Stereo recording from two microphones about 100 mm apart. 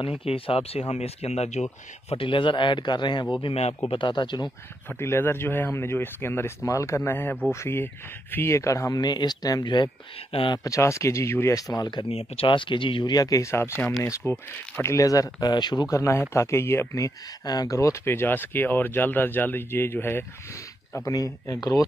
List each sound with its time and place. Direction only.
0.2 s speech: 75° left (ahead or behind); by 1.5 s 90° left
2.0 s a man's voice: 60° left (ahead or behind)
3.4 s speech: 90° left
3.9 s a man's voice: 50° left (ahead or behind)
4.8 s speech: 25° left (ahead or behind); by 9.8 s 45° left (ahead or behind)
10.3 s speech: 55° left (ahead or behind)
10.6 s speech: 30° left (ahead or behind)
11.7 s a man's voice: 45° left (ahead or behind)
12.1 s speech: 75° left (ahead or behind); by 13.1 s 55° left (ahead or behind)
13.1 s speech: 40° left (ahead or behind); by 20.2 s 20° left (ahead or behind)
20.9 s speech: 35° left (ahead or behind)